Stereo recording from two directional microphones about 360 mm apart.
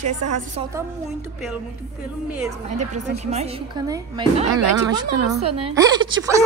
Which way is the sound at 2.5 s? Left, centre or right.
Centre.